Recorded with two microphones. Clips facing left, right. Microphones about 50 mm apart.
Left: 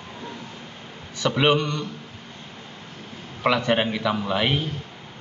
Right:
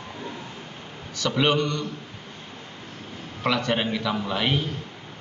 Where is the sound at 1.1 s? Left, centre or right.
Centre.